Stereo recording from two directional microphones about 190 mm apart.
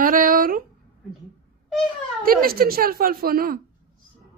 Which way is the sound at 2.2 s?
50° right (ahead or behind).